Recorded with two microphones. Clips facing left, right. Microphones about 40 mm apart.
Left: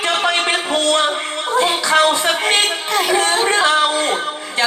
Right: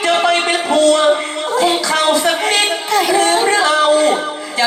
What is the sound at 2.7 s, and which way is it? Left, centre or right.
Music, left.